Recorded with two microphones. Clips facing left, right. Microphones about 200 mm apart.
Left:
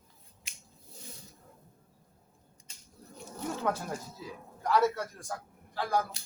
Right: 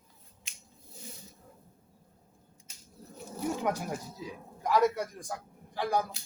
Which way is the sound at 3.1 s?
10° right (ahead or behind).